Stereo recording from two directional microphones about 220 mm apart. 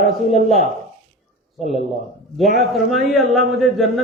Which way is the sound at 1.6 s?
30° left (ahead or behind).